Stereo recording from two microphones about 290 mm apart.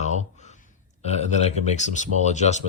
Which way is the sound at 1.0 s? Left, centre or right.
Left.